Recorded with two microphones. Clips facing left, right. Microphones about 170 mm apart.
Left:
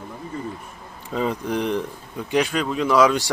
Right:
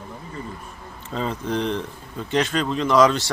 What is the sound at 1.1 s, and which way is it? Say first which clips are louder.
Speech: left 2 dB; 10° left (ahead or behind).